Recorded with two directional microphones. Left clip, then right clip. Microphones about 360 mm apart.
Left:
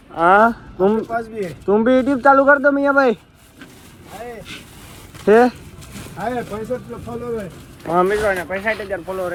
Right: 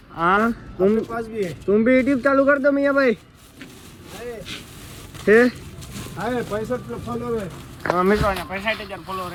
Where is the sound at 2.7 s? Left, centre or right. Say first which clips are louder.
Left 2 dB; left.